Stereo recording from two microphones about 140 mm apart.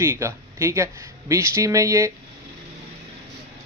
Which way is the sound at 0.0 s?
15° right (ahead or behind).